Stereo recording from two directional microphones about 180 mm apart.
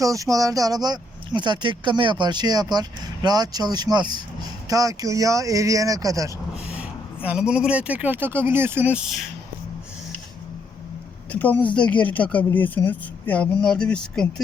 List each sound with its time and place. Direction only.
0.0 s speech: 20° right (ahead or behind)
6.7 s speech: 5° right (ahead or behind)
11.3 s speech: 10° left (ahead or behind)